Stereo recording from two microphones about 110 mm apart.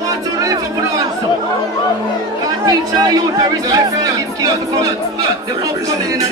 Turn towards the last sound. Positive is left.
turn(degrees=-30)  # may be behind; listen again after turning